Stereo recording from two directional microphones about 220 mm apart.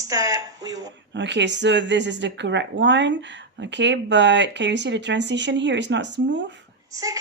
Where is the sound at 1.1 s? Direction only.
55° right (ahead or behind).